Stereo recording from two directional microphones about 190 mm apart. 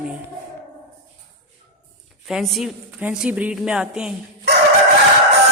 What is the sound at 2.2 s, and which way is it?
A woman's voice, centre (ahead or behind).